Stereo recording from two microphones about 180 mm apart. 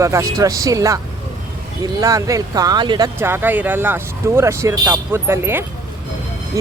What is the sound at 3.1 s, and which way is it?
Speech, 15° right (ahead or behind).